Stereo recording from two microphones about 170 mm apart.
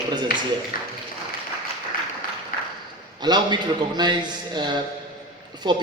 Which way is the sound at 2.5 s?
55° left (ahead or behind).